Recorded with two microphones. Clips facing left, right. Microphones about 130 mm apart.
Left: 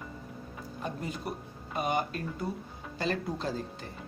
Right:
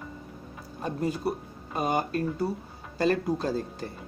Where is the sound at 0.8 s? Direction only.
40° right (ahead or behind).